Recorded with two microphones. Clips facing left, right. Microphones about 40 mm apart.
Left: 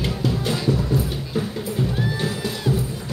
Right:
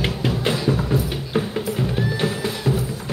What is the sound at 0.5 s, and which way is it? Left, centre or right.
Music, right.